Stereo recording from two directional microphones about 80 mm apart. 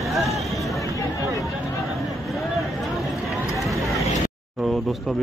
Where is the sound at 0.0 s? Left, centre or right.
Centre.